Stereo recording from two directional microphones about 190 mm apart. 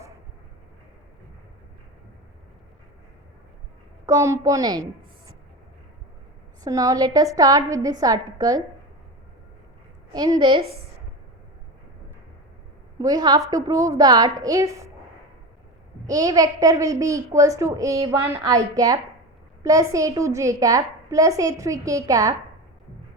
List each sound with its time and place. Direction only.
4.0 s a woman's voice: 15° right (ahead or behind)
6.7 s a woman's voice: 20° right (ahead or behind)
10.1 s a woman's voice: 20° right (ahead or behind)
13.0 s a woman's voice: 20° right (ahead or behind)
16.0 s a woman's voice: 20° right (ahead or behind)